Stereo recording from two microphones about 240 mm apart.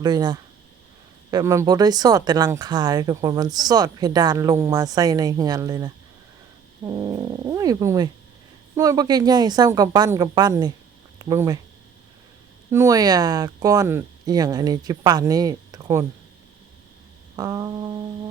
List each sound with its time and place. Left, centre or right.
0.0 s speech: centre
12.7 s speech: centre
17.3 s speech: centre